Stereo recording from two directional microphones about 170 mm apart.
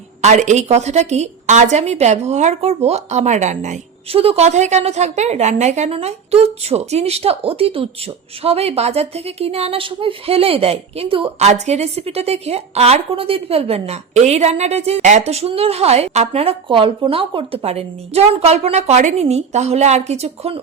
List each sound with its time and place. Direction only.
0.2 s a woman's voice: 45° right (ahead or behind)